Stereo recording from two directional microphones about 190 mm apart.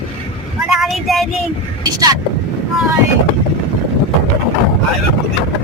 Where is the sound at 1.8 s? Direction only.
20° right (ahead or behind).